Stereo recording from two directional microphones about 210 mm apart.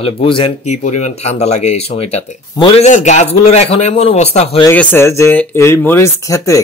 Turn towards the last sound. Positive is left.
turn(degrees=15)  # may be behind; listen again after turning